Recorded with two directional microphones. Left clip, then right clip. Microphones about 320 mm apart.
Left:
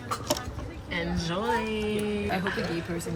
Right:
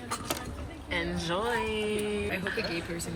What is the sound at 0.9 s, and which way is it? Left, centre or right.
Speech, centre.